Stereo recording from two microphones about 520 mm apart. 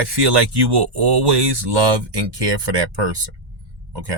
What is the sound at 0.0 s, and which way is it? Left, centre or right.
Speech, right.